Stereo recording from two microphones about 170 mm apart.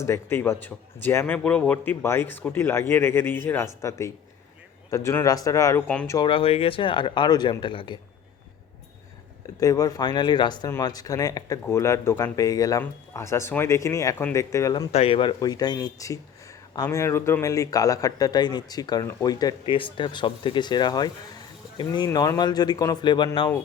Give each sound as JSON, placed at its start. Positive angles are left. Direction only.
{"t": 0.0, "sound": "a man's voice", "side_deg": 15}
{"t": 5.9, "sound": "a man's voice", "side_deg": 10}
{"t": 6.1, "sound": "speech", "side_deg": 30}
{"t": 9.6, "sound": "a man's voice", "side_deg": 20}
{"t": 14.9, "sound": "speech", "side_deg": 35}